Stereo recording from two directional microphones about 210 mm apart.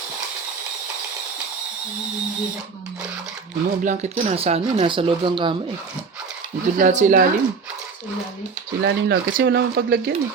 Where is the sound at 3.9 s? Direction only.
30° right (ahead or behind).